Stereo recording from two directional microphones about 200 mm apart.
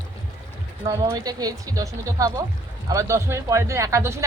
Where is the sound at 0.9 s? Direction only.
15° right (ahead or behind).